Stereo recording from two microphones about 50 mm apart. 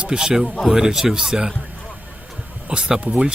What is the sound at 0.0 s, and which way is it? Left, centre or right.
Speech, centre.